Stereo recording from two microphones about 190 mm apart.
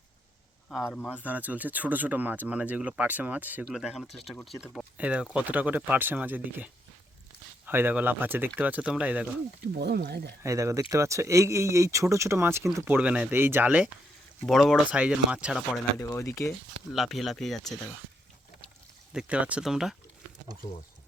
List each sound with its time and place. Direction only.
0.8 s speech: 10° left (ahead or behind)
1.2 s speech: 10° right (ahead or behind)
7.7 s speech: 10° right (ahead or behind)
9.7 s speech: 55° right (ahead or behind)
10.4 s speech: 15° right (ahead or behind)
16.0 s speech: 15° left (ahead or behind)
16.9 s speech: centre (ahead or behind)
19.1 s speech: 5° right (ahead or behind)